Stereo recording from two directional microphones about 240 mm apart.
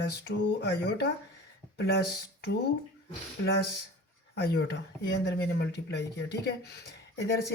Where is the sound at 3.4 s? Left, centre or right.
Left.